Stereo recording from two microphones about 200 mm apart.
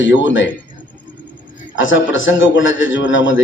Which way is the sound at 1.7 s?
70° left (ahead or behind).